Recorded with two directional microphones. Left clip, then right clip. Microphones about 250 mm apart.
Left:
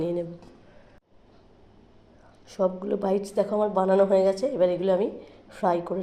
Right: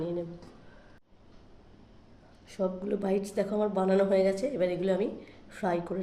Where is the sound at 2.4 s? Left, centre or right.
Centre.